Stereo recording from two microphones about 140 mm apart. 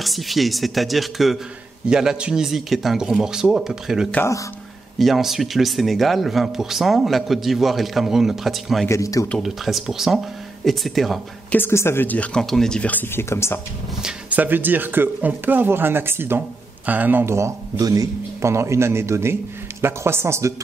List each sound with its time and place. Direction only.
0.0 s speech: centre (ahead or behind)
4.1 s speech: 15° left (ahead or behind)
4.9 s speech: centre (ahead or behind)
8.8 s speech: 20° left (ahead or behind)
9.4 s speech: centre (ahead or behind)
11.5 s speech: 15° left (ahead or behind)
14.0 s speech: 10° right (ahead or behind)